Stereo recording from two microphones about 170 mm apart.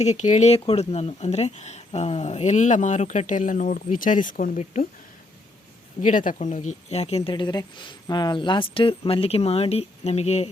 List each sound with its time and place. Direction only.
0.0 s speech: 45° left (ahead or behind)
6.0 s speech: 50° left (ahead or behind)